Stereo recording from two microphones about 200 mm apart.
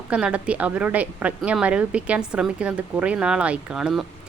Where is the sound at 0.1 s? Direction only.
5° right (ahead or behind).